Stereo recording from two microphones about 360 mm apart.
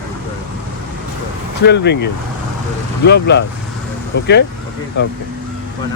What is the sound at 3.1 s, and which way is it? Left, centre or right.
Speech, left.